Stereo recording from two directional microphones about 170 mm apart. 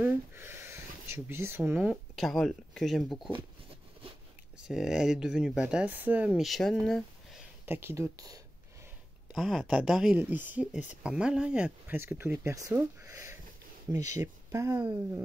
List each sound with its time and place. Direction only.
0.0 s a sound: 15° right (ahead or behind)
2.1 s speech: centre (ahead or behind)
4.6 s speech: 5° right (ahead or behind)
7.6 s speech: 15° right (ahead or behind)
9.3 s speech: centre (ahead or behind); by 15.0 s 20° right (ahead or behind)